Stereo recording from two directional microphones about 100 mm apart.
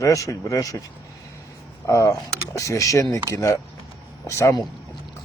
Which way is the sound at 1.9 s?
30° left (ahead or behind).